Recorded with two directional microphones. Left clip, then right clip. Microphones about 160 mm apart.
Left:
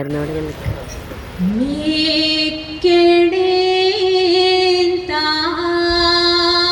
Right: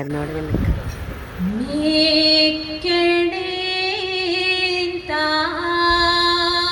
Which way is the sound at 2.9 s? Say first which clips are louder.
Left 6 dB; 45° right (ahead or behind).